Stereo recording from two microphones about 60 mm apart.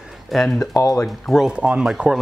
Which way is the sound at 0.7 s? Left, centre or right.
Left.